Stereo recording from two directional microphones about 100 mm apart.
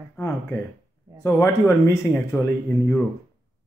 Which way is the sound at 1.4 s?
25° left (ahead or behind).